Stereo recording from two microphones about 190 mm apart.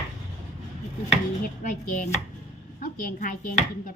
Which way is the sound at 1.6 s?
40° left (ahead or behind).